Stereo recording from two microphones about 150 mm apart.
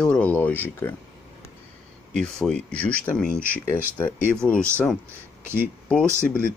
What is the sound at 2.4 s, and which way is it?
Speech, 5° left (ahead or behind).